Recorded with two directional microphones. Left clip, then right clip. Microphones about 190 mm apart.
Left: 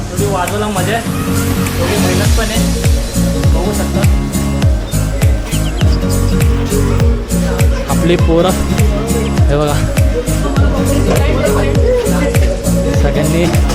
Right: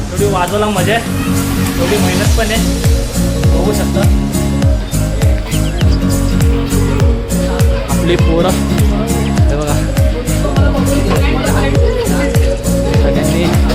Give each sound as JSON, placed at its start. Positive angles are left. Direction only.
{"t": 8.0, "sound": "speech", "side_deg": 20}